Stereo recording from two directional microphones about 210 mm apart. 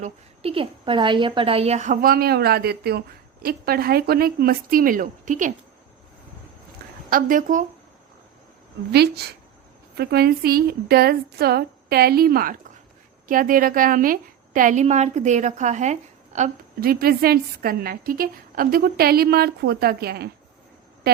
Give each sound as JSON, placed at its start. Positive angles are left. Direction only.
{"t": 0.0, "sound": "a woman's voice", "side_deg": -25}
{"t": 7.1, "sound": "a woman's voice", "side_deg": -40}
{"t": 8.9, "sound": "a woman's voice", "side_deg": -50}